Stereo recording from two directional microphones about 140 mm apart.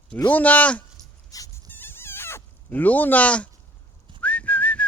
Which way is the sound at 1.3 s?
25° left (ahead or behind).